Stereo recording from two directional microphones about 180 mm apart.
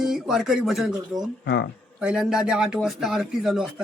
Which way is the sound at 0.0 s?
Centre (ahead or behind).